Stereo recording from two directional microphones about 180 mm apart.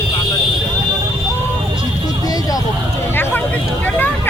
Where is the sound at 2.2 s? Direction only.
20° left (ahead or behind).